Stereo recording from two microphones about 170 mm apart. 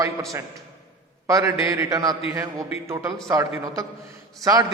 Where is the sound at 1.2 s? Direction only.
20° right (ahead or behind).